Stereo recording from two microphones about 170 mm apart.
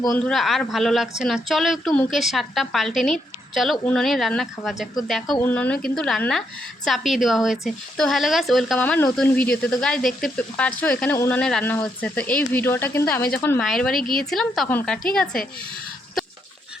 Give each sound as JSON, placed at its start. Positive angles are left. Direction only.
{"t": 0.2, "sound": "a woman's voice", "side_deg": 0}
{"t": 5.4, "sound": "a woman's voice", "side_deg": 10}
{"t": 13.6, "sound": "a woman's voice", "side_deg": 0}
{"t": 16.2, "sound": "goat", "side_deg": 0}